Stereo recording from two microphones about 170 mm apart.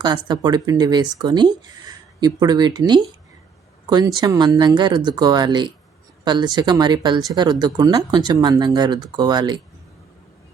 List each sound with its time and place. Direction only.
0.0 s speech: 25° right (ahead or behind)